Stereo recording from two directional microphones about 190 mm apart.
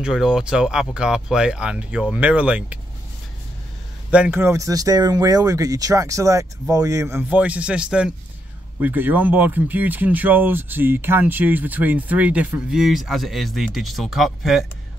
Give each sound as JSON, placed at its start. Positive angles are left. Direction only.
{"t": 0.0, "sound": "speech", "side_deg": -5}
{"t": 4.1, "sound": "speech", "side_deg": -10}